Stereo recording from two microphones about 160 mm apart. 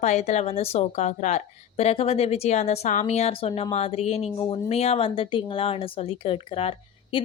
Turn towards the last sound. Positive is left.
turn(degrees=35)  # may be behind; listen again after turning